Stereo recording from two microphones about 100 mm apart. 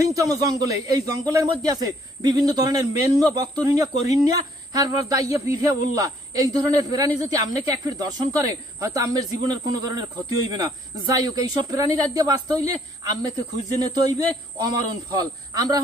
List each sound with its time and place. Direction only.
0.0 s speech: 35° right (ahead or behind)
11.1 s speech: 40° right (ahead or behind)